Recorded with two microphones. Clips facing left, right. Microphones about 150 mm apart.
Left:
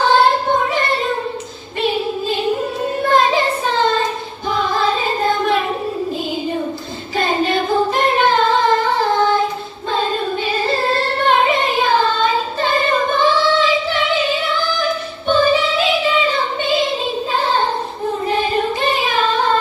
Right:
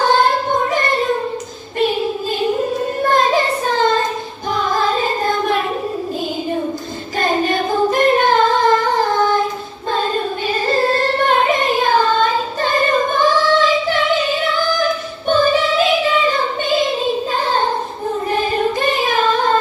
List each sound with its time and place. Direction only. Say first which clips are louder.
0.0 s singing: left 1 dB; 45° right (ahead or behind)
3.0 s a sound: left 1 dB; 45° right (ahead or behind)
7.2 s singing: even; 45° right (ahead or behind)
10.7 s a sound: right 5 dB; 45° right (ahead or behind)
15.3 s music: even; 45° right (ahead or behind)
18.8 s child singing: right 1 dB; 45° right (ahead or behind)